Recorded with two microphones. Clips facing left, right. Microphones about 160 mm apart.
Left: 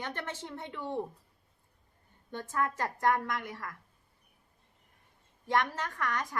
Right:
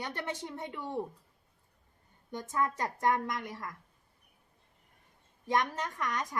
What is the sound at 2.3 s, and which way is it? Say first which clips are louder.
A woman's voice: even; 15° right (ahead or behind).